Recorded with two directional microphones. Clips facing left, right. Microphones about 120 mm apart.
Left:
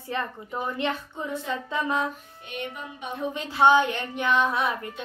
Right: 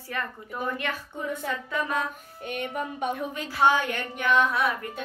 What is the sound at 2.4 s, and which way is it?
Music, 50° right (ahead or behind).